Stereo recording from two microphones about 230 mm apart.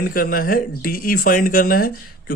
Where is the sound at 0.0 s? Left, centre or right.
Left.